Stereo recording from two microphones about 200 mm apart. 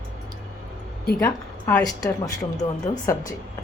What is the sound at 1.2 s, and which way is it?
A woman's voice, 10° left (ahead or behind).